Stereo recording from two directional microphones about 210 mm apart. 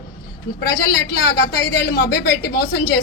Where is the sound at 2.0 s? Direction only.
50° left (ahead or behind).